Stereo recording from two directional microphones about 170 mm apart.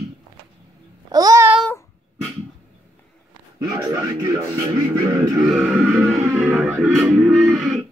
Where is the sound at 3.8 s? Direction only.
20° right (ahead or behind).